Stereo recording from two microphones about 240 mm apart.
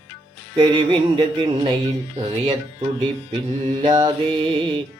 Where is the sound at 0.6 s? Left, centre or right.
Centre.